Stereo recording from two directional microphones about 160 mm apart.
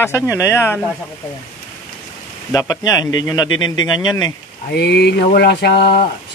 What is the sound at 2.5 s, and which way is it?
A man's voice, 20° left (ahead or behind).